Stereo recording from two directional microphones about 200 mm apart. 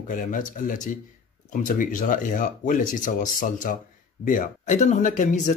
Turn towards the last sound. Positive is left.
turn(degrees=40)  # may be behind; listen again after turning